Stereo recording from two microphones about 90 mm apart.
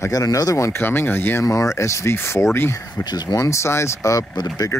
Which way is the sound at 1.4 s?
40° left (ahead or behind).